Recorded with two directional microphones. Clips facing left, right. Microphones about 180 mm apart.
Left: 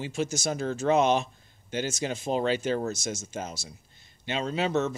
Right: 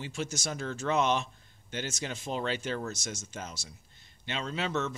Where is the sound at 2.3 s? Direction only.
40° left (ahead or behind).